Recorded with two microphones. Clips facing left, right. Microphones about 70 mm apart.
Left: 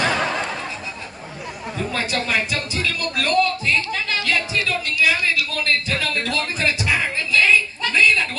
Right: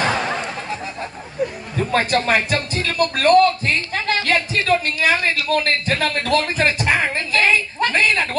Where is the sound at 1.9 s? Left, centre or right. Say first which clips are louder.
Right 6 dB; right.